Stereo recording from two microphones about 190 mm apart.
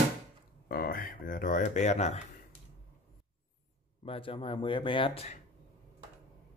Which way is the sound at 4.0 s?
30° left (ahead or behind).